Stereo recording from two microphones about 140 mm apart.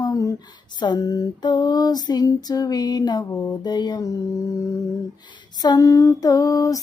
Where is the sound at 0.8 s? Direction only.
30° left (ahead or behind).